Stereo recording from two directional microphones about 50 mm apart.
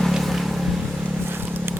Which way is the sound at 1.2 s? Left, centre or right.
Right.